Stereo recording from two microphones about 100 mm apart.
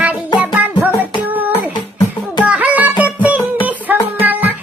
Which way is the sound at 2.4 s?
15° right (ahead or behind).